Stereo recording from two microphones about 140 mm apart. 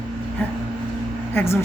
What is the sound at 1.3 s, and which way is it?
Speech, 20° left (ahead or behind).